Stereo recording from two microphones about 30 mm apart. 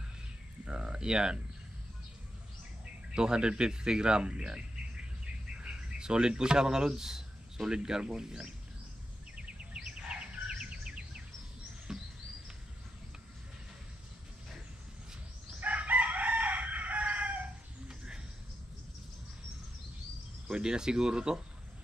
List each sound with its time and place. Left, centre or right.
0.7 s speech: right
3.2 s speech: right
5.2 s bird: right
8.1 s speech: right
11.9 s a sound: centre
15.6 s chicken: right
17.8 s a sound: right
20.5 s speech: right